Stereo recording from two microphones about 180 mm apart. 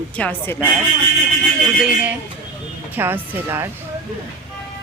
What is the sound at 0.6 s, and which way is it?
Speech, 5° right (ahead or behind).